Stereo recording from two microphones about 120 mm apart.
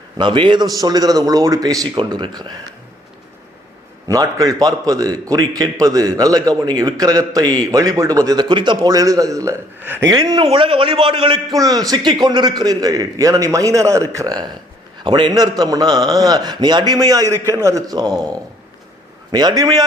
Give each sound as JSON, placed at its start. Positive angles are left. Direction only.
{"t": 0.2, "sound": "a man's voice", "side_deg": -40}
{"t": 4.1, "sound": "a man's voice", "side_deg": -30}
{"t": 10.4, "sound": "a man's voice", "side_deg": -45}
{"t": 19.3, "sound": "a man's voice", "side_deg": -35}